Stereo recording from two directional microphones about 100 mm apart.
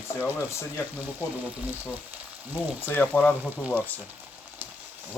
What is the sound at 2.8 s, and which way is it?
Speech, 20° left (ahead or behind).